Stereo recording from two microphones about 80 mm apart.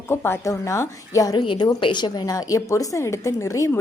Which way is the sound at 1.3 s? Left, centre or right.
Left.